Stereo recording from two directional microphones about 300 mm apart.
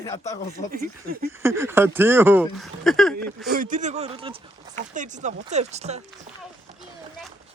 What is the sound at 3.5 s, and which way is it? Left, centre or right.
Speech, right.